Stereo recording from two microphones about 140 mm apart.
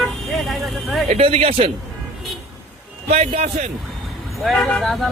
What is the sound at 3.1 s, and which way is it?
Speech, 50° right (ahead or behind).